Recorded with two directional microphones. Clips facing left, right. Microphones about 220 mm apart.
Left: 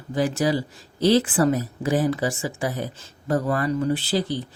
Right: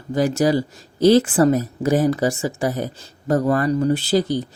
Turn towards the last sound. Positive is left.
turn(degrees=-45)  # may be behind; listen again after turning